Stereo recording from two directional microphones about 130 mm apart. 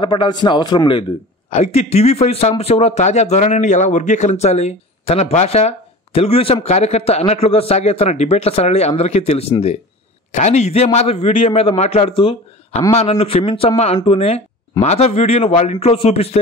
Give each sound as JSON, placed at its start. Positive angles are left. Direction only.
{"t": 0.0, "sound": "a man's voice", "side_deg": 40}
{"t": 1.5, "sound": "a man's voice", "side_deg": 55}